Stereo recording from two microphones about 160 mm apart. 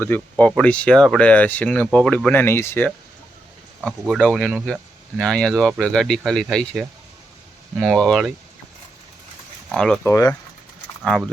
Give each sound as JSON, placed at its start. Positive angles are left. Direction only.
{"t": 0.0, "sound": "speech", "side_deg": 10}
{"t": 3.8, "sound": "speech", "side_deg": -5}
{"t": 9.7, "sound": "speech", "side_deg": 5}
{"t": 10.0, "sound": "speech", "side_deg": 20}